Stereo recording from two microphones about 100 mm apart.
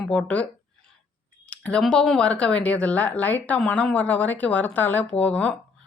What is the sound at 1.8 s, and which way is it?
Speech, 5° left (ahead or behind).